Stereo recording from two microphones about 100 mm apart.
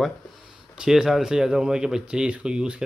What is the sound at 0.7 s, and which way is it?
Speech, 5° right (ahead or behind).